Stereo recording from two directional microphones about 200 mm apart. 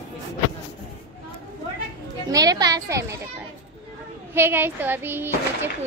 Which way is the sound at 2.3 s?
20° right (ahead or behind).